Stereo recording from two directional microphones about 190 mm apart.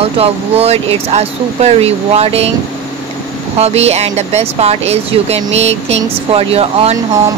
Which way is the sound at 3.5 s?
35° right (ahead or behind).